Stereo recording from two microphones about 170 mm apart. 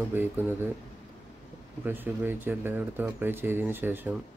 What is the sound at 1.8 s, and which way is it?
Speech, 10° right (ahead or behind).